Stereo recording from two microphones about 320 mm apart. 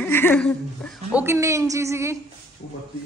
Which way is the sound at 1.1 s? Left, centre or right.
Centre.